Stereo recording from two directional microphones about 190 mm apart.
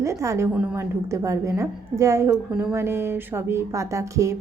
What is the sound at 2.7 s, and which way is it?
A woman's voice, 15° right (ahead or behind).